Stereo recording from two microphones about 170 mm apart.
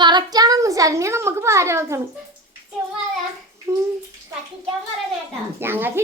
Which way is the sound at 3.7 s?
15° right (ahead or behind).